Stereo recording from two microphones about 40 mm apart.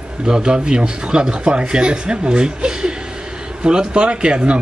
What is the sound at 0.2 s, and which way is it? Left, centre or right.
Speech, right.